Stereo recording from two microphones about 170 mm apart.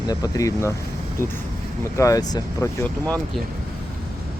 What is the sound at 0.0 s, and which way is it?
Speech, 20° left (ahead or behind).